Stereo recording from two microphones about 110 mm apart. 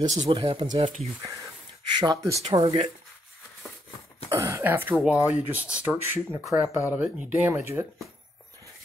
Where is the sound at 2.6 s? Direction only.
60° right (ahead or behind).